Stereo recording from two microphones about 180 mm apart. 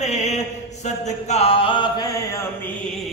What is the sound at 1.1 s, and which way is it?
Mantra, 40° left (ahead or behind).